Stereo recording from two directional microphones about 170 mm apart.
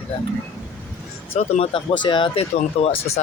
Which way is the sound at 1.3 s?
35° left (ahead or behind).